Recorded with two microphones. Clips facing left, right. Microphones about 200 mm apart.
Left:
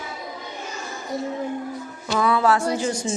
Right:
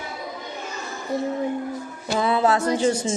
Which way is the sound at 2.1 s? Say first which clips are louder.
Even; 25° right (ahead or behind).